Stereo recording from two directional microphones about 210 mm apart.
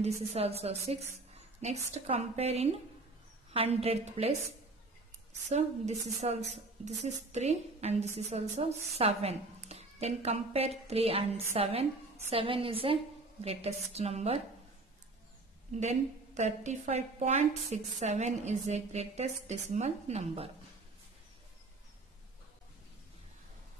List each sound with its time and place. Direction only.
0.0 s a woman's voice: 30° right (ahead or behind)
5.5 s a woman's voice: 30° right (ahead or behind)
15.8 s a woman's voice: 35° right (ahead or behind)